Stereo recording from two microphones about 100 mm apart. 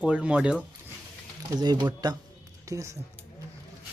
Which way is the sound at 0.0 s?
10° right (ahead or behind).